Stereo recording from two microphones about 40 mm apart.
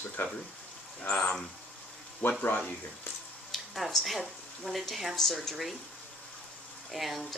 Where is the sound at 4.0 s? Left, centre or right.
Centre.